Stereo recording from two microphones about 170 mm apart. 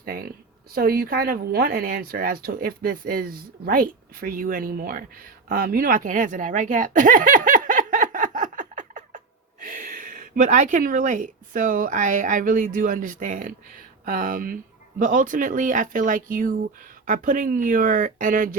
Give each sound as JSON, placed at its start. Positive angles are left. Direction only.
{"t": 0.0, "sound": "a woman's voice", "side_deg": -65}